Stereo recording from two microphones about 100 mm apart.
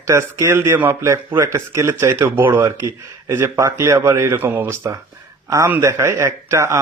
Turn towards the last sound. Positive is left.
turn(degrees=-30)  # may be behind; listen again after turning